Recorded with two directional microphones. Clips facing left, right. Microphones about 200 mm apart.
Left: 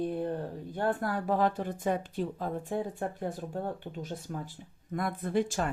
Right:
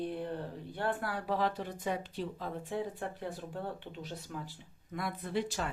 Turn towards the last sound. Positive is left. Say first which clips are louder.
# left 5 dB
turn(degrees=50)  # may be behind; listen again after turning